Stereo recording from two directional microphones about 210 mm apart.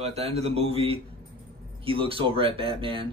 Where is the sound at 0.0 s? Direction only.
30° right (ahead or behind).